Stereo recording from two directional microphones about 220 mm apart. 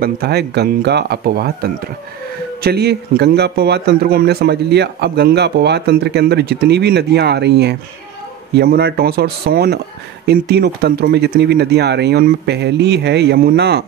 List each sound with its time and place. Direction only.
0.0 s a man's voice: 45° right (ahead or behind)